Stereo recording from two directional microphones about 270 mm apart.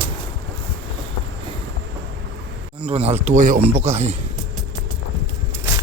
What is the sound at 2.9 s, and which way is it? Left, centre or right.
Speech, right.